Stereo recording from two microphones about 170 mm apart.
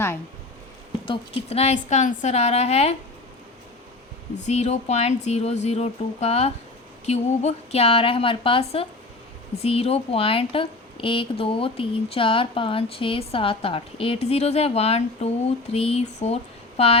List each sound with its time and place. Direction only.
1.0 s a woman's voice: 30° left (ahead or behind)
4.4 s a woman's voice: 40° left (ahead or behind)